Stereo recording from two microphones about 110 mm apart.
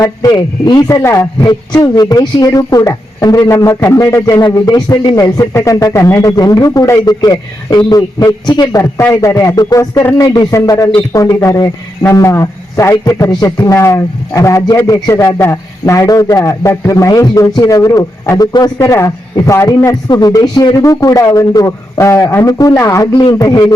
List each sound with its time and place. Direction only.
0.0 s a man's voice: 35° left (ahead or behind)
8.8 s a man's voice: 15° left (ahead or behind)
9.2 s a man's voice: 30° left (ahead or behind)